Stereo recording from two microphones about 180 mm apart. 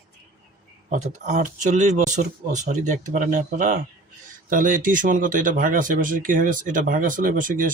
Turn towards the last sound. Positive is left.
turn(degrees=-50)  # may be behind; listen again after turning